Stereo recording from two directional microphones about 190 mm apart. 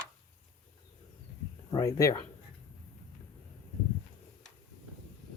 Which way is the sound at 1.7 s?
20° left (ahead or behind).